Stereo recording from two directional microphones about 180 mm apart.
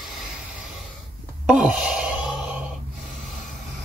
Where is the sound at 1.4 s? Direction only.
5° right (ahead or behind).